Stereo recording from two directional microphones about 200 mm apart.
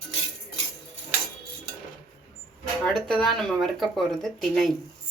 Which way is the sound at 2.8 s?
Centre (ahead or behind).